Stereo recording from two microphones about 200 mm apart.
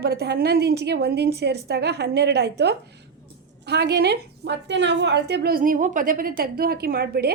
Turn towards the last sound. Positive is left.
turn(degrees=-50)  # may be behind; listen again after turning